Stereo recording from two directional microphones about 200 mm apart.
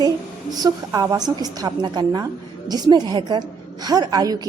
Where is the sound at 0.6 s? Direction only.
20° right (ahead or behind).